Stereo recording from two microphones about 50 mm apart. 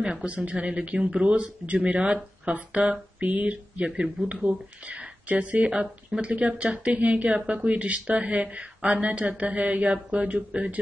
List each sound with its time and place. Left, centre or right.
0.0 s speech: right